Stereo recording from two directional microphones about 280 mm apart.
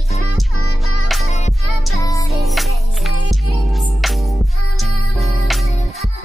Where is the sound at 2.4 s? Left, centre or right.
Centre.